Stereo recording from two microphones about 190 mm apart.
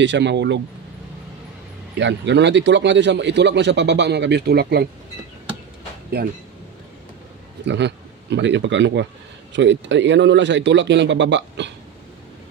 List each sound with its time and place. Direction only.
0.0 s a man's voice: 70° right (ahead or behind)
2.0 s a man's voice: 70° right (ahead or behind)
7.6 s a man's voice: 65° right (ahead or behind)